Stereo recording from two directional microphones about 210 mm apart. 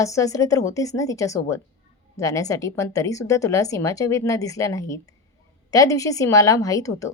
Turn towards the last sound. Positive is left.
turn(degrees=15)  # may be behind; listen again after turning